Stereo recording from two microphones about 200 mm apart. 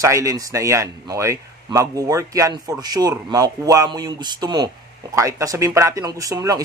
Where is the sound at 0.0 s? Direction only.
15° right (ahead or behind).